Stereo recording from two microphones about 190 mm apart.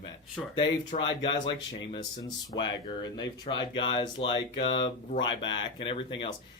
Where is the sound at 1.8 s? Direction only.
20° left (ahead or behind).